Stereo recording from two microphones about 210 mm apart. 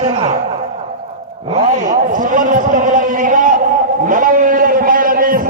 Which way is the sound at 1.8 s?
40° right (ahead or behind).